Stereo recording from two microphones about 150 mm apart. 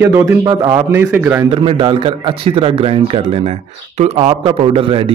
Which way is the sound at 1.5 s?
35° right (ahead or behind).